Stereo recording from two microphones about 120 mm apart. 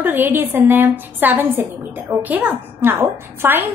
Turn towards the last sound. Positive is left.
turn(degrees=-20)  # may be behind; listen again after turning